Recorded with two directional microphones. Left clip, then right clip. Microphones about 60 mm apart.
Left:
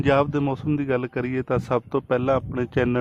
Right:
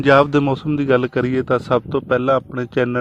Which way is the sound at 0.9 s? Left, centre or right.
Right.